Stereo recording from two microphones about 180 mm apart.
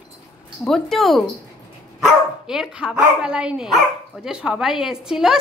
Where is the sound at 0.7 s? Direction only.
Centre (ahead or behind).